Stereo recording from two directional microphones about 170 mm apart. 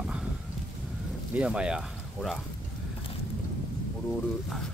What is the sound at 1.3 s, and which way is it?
Speech, 5° right (ahead or behind).